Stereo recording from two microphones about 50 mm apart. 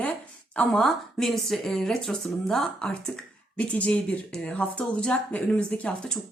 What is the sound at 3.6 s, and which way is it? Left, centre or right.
Speech, left.